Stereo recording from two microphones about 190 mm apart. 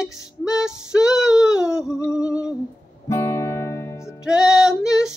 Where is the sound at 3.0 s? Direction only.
15° left (ahead or behind).